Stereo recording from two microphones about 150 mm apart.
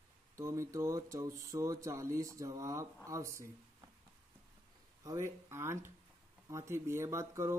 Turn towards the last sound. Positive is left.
turn(degrees=-20)  # may be behind; listen again after turning